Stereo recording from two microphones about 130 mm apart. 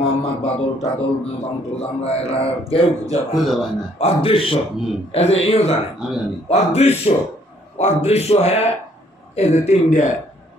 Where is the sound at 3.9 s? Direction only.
50° left (ahead or behind).